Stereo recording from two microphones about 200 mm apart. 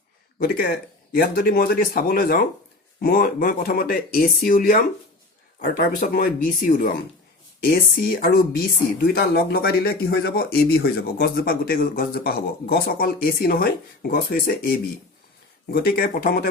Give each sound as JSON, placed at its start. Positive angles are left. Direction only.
{"t": 0.3, "sound": "a man's voice", "side_deg": 50}